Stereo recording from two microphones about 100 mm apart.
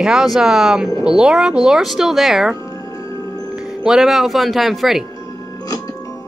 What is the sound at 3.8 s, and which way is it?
Speech, 5° right (ahead or behind).